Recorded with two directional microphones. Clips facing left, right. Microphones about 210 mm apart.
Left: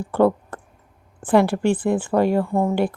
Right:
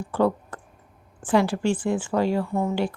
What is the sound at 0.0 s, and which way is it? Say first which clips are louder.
A woman's voice: left 5 dB; 55° left (ahead or behind).